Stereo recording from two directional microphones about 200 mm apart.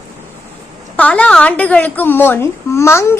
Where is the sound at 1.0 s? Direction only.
5° left (ahead or behind).